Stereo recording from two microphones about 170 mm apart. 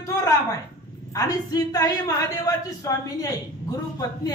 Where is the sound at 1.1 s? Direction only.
20° left (ahead or behind).